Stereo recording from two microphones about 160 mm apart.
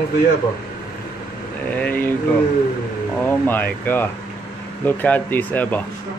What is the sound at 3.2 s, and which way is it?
Speech, 10° left (ahead or behind).